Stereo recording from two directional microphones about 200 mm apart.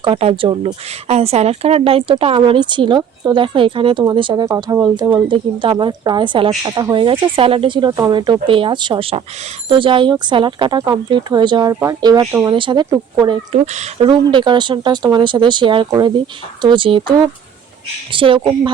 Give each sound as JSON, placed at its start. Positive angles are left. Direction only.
{"t": 0.0, "sound": "speech", "side_deg": -25}